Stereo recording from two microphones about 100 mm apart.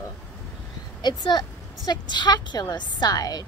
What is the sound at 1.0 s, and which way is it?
A woman's voice, 45° left (ahead or behind).